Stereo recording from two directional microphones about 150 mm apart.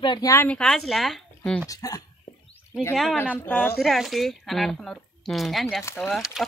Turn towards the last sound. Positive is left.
turn(degrees=0)  # may be behind; listen again after turning